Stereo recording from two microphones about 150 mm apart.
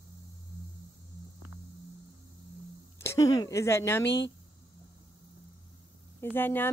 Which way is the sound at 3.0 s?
20° left (ahead or behind).